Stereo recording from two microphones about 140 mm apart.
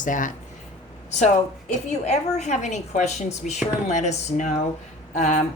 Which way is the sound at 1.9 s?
55° left (ahead or behind).